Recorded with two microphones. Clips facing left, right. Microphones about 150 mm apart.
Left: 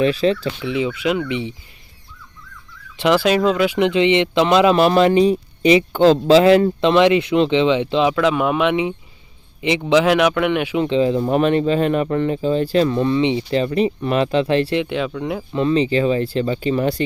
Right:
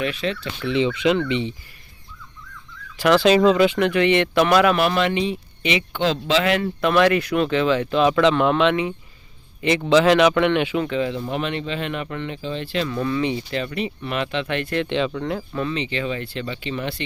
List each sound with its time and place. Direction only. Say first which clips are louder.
0.0 s speech: left 8 dB; 35° left (ahead or behind)
0.6 s a man's voice: right 5 dB; 10° left (ahead or behind)
3.0 s a man's voice: left 1 dB; 15° left (ahead or behind)
3.2 s speech: right 1 dB; centre (ahead or behind)
3.8 s speech: left 3 dB; 20° left (ahead or behind); by 6.7 s 35° left (ahead or behind)
6.8 s speech: left 4 dB; 20° left (ahead or behind)
8.1 s a man's voice: even; 5° left (ahead or behind)
10.8 s speech: left 7 dB; 30° left (ahead or behind)
11.3 s speech: left 10 dB; 45° left (ahead or behind)
13.0 s speech: left 5 dB; 25° left (ahead or behind)
13.5 s speech: left 8 dB; 35° left (ahead or behind)
14.8 s a man's voice: left 1 dB; 5° left (ahead or behind)
15.5 s speech: left 13 dB; 35° left (ahead or behind)